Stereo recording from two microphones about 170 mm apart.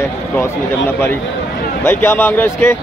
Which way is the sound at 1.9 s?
10° left (ahead or behind).